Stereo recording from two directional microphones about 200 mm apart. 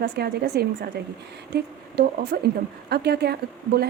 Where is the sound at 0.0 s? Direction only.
55° right (ahead or behind).